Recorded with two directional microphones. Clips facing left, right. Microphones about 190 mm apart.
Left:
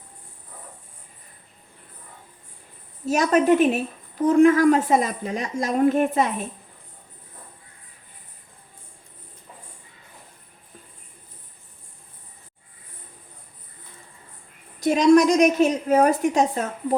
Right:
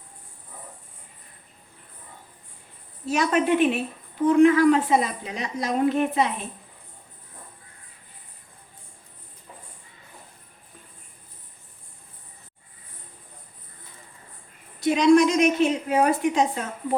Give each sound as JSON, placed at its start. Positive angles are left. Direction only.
{"t": 3.1, "sound": "a woman's voice", "side_deg": 45}
{"t": 14.8, "sound": "a woman's voice", "side_deg": 45}